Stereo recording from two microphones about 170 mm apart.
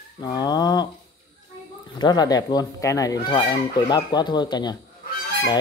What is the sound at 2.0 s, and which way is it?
Speech, 25° left (ahead or behind).